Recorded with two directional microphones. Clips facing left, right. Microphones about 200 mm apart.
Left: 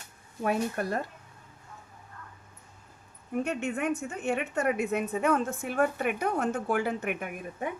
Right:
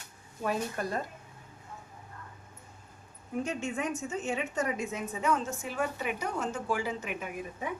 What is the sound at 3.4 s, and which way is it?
A woman's voice, 65° left (ahead or behind).